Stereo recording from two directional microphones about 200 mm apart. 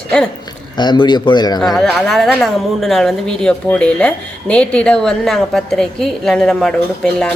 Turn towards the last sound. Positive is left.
turn(degrees=5)  # may be behind; listen again after turning